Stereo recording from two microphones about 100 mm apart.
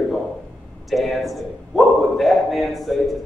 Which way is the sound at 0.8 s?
Centre (ahead or behind).